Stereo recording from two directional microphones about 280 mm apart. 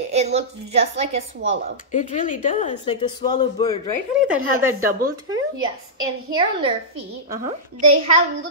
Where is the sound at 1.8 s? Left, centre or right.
Left.